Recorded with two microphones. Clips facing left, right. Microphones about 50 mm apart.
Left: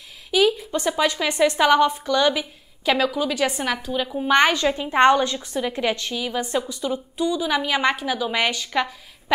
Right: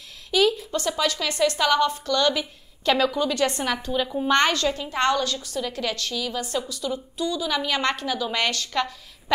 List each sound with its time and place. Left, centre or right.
0.3 s a woman's voice: centre